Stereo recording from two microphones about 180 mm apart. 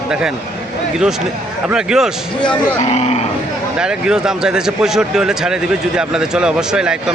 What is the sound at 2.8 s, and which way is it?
Speech, 40° left (ahead or behind).